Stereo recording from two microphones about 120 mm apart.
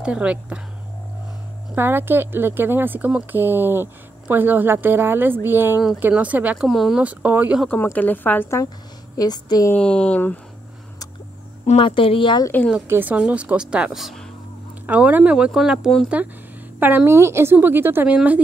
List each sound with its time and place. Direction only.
0.0 s speech: 10° right (ahead or behind)
1.8 s speech: 15° right (ahead or behind)
7.7 s speech: 15° left (ahead or behind)
8.6 s speech: 35° left (ahead or behind)
9.8 s speech: 10° left (ahead or behind)
11.6 s speech: 50° left (ahead or behind)
12.8 s speech: 15° right (ahead or behind)
14.9 s speech: 15° right (ahead or behind)
16.8 s speech: 20° right (ahead or behind)